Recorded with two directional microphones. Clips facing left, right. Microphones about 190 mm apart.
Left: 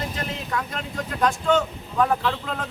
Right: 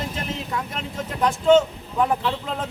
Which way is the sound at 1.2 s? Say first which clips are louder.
Right 5 dB; 20° right (ahead or behind).